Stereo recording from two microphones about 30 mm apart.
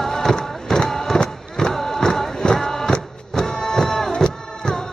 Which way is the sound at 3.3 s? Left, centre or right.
Left.